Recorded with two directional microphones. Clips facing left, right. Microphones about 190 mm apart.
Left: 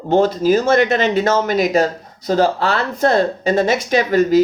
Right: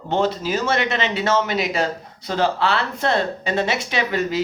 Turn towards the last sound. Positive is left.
turn(degrees=45)  # may be behind; listen again after turning